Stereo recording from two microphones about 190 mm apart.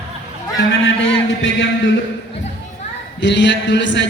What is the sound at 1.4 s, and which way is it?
Speech, 80° left.